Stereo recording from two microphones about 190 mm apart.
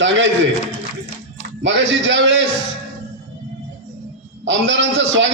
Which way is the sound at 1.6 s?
75° right (ahead or behind).